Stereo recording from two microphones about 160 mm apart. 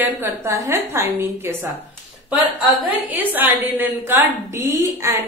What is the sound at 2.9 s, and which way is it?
A woman's voice, 10° right (ahead or behind).